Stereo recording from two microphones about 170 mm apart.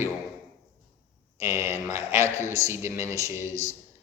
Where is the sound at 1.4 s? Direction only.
15° right (ahead or behind).